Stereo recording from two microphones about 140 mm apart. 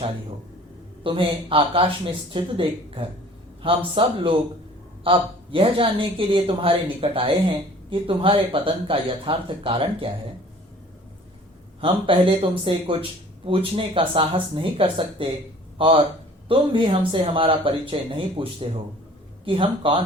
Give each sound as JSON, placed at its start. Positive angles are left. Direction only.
{"t": 1.0, "sound": "speech", "side_deg": -40}
{"t": 11.8, "sound": "speech", "side_deg": -40}